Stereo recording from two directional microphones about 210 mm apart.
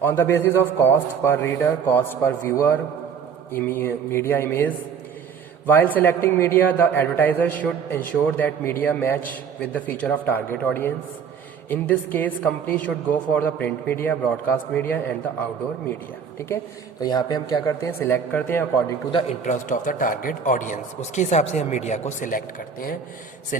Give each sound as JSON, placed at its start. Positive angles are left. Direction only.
{"t": 0.0, "sound": "a man's voice", "side_deg": 10}
{"t": 17.0, "sound": "a man's voice", "side_deg": 20}
{"t": 19.5, "sound": "speech", "side_deg": 35}